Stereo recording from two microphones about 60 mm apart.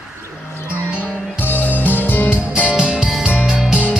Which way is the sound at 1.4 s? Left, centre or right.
Left.